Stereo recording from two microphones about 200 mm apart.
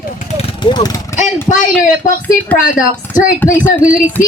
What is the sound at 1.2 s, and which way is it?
Speech, 40° left (ahead or behind).